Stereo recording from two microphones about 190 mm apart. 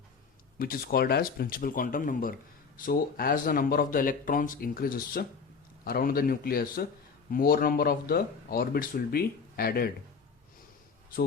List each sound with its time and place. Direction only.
0.6 s speech: 50° left (ahead or behind)